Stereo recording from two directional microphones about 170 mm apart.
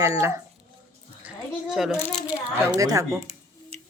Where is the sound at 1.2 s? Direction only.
Centre (ahead or behind).